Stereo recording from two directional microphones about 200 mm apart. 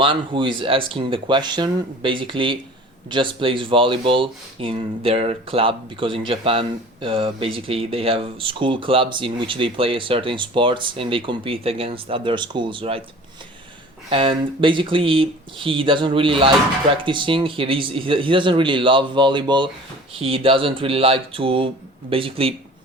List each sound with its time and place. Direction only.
0.0 s speech: 25° right (ahead or behind)
14.1 s speech: 25° right (ahead or behind)